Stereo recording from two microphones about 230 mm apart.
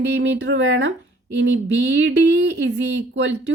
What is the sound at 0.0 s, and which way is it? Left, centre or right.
A woman's voice, right.